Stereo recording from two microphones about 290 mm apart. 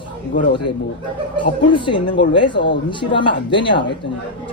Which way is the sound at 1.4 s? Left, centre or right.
Centre.